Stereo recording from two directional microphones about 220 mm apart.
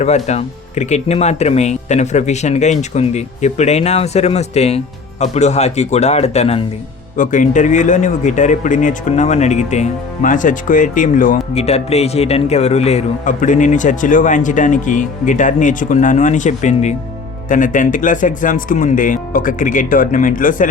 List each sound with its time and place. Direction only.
0.0 s speech: 30° left (ahead or behind)